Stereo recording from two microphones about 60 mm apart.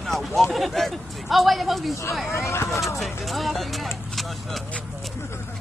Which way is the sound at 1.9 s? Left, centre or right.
Left.